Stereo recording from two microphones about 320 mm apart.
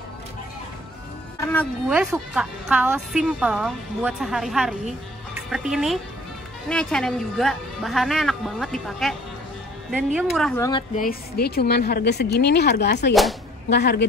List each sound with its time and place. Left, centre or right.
1.5 s speech: centre
11.0 s a woman's voice: left
13.1 s speech: centre
13.7 s a woman's voice: left